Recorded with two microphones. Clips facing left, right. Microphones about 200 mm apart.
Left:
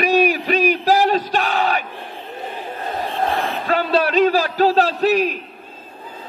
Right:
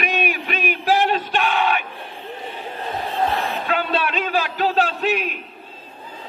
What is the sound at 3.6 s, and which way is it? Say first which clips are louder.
A man's voice: left 7 dB; 40° left (ahead or behind).